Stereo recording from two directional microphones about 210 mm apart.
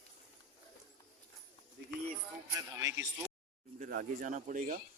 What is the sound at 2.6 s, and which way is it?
Speech, 15° right (ahead or behind).